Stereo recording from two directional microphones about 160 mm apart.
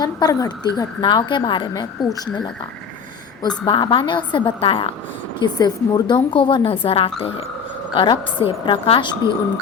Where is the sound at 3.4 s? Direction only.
30° left (ahead or behind).